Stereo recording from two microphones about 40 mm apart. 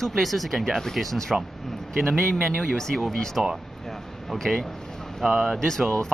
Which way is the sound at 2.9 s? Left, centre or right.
Centre.